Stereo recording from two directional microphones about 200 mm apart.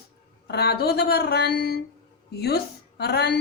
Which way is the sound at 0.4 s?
55° left (ahead or behind).